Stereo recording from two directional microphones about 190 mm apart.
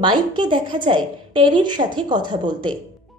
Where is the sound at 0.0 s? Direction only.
25° right (ahead or behind).